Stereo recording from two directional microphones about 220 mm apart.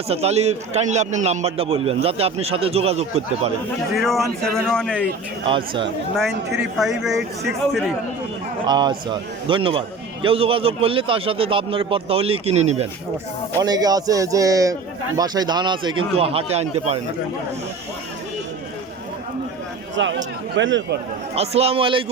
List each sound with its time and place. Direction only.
0.1 s a man's voice: 30° right (ahead or behind)
3.9 s a man's voice: centre (ahead or behind)
5.5 s a man's voice: 25° right (ahead or behind)
6.1 s a man's voice: centre (ahead or behind)
8.6 s a man's voice: 20° right (ahead or behind)
13.6 s a man's voice: 15° right (ahead or behind)
20.0 s speech: 55° right (ahead or behind)
21.3 s a man's voice: 30° right (ahead or behind)